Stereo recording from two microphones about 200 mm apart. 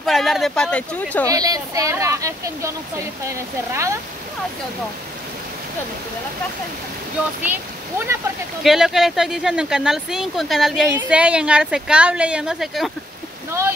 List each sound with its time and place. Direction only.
0.0 s speech: centre (ahead or behind)
1.2 s speech: 20° right (ahead or behind)
8.6 s speech: centre (ahead or behind)
13.5 s speech: 15° right (ahead or behind)